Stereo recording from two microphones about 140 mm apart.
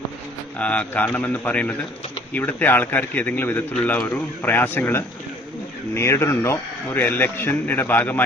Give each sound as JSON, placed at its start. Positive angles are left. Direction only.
{"t": 0.6, "sound": "a man's voice", "side_deg": 10}